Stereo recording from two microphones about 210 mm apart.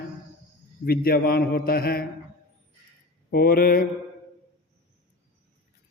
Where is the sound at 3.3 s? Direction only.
45° left (ahead or behind).